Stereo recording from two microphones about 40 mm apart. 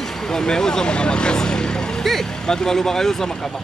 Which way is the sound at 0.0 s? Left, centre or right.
Centre.